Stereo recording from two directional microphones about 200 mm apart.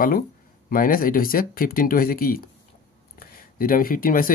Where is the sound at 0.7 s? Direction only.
45° left (ahead or behind).